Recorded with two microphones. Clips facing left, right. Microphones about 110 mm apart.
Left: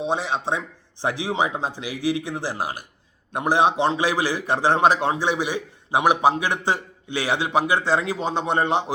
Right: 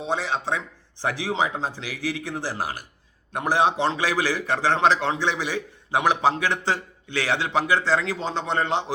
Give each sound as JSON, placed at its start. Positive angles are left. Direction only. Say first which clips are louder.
{"t": 0.0, "sound": "a man's voice", "louder": "left 2 dB", "side_deg": 20}